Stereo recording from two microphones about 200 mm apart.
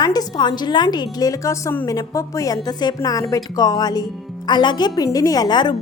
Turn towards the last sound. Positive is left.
turn(degrees=20)  # may be behind; listen again after turning